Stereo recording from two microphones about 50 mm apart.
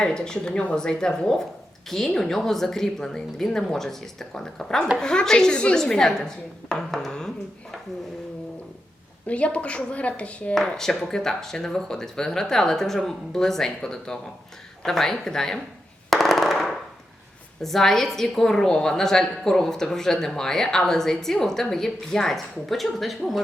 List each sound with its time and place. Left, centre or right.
0.0 s a woman's voice: centre
9.2 s a woman's voice: left
10.5 s a woman's voice: centre
16.0 s machine gun: centre
17.6 s a woman's voice: centre